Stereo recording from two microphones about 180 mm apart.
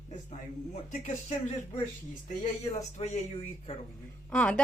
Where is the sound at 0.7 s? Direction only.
40° left (ahead or behind).